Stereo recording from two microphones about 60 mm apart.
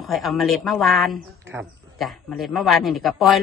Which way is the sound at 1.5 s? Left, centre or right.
Right.